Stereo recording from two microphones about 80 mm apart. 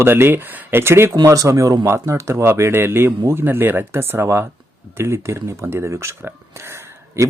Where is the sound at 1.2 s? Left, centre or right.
Right.